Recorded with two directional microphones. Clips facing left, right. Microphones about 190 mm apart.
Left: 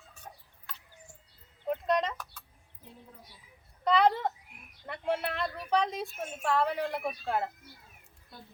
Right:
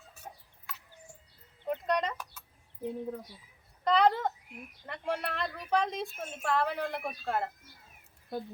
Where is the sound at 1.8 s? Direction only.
Centre (ahead or behind).